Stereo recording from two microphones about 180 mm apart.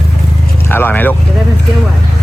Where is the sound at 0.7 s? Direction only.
10° left (ahead or behind).